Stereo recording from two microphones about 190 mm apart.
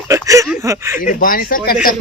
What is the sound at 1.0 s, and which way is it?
Speech, 45° left (ahead or behind).